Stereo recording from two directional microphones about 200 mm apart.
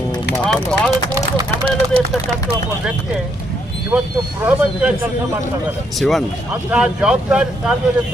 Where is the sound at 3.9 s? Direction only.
5° right (ahead or behind).